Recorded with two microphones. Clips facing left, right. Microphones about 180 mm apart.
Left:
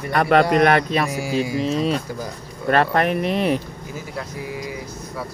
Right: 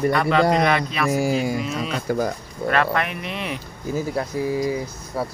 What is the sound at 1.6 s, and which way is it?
Speech, 30° left (ahead or behind).